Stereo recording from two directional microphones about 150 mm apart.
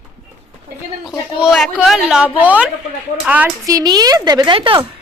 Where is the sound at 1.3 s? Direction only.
5° right (ahead or behind).